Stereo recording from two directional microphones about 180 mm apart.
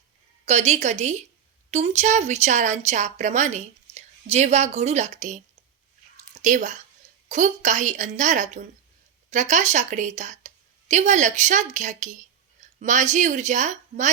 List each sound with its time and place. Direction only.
0.4 s a woman's voice: 40° right (ahead or behind)
6.4 s a woman's voice: 45° right (ahead or behind)